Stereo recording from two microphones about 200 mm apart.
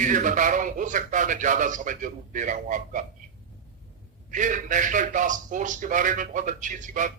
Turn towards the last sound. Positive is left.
turn(degrees=-40)  # may be behind; listen again after turning